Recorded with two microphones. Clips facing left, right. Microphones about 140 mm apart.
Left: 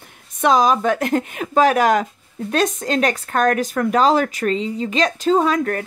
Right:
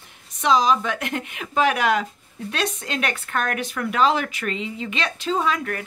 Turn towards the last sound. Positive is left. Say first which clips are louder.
# left 6 dB
turn(degrees=40)  # may be behind; listen again after turning